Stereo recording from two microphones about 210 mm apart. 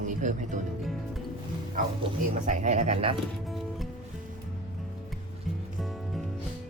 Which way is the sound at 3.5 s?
Centre (ahead or behind).